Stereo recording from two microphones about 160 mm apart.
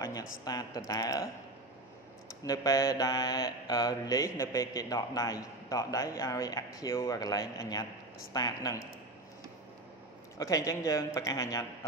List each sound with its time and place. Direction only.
0.0 s mantra: 25° left (ahead or behind)
2.4 s mantra: 20° left (ahead or behind)
10.3 s mantra: 20° left (ahead or behind)